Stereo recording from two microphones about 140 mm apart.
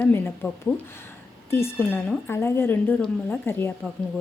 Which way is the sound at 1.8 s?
10° left (ahead or behind).